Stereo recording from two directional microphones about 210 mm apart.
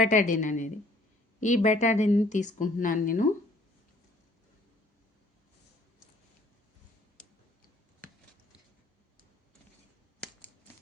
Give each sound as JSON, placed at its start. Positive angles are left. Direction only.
{"t": 0.0, "sound": "a woman's voice", "side_deg": 35}